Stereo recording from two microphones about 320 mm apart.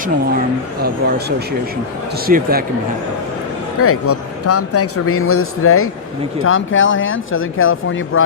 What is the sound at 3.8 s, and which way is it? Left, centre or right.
A man's voice, left.